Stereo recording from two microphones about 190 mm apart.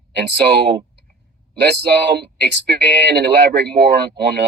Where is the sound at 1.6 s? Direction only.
60° right (ahead or behind).